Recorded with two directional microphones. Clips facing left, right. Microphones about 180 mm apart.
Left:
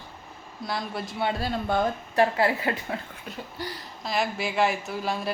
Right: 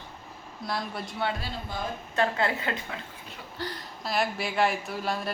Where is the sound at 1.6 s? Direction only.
60° left (ahead or behind).